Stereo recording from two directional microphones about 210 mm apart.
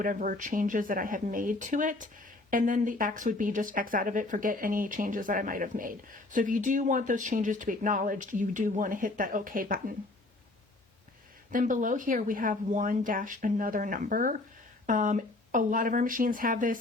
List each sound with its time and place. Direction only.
0.0 s speech: 40° right (ahead or behind)
11.5 s speech: 40° right (ahead or behind)